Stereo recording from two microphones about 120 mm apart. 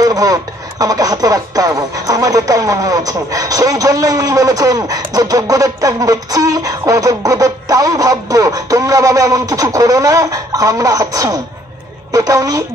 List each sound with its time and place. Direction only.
0.0 s speech: 30° right (ahead or behind)